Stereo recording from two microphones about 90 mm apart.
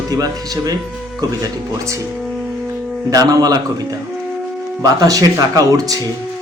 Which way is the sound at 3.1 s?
45° right (ahead or behind).